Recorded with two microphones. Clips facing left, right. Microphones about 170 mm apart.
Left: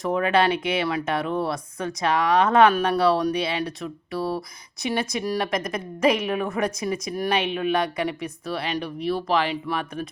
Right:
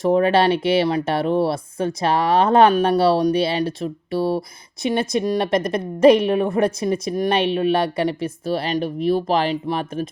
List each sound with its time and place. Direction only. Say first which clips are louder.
0.0 s speech: right 5 dB; 30° right (ahead or behind)
8.6 s speech: right 5 dB; 45° right (ahead or behind)